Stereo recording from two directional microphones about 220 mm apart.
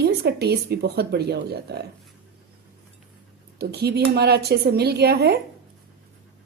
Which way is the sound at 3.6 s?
45° right (ahead or behind).